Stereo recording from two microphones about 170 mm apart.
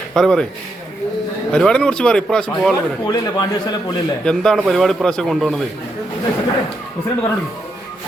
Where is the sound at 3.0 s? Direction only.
25° left (ahead or behind).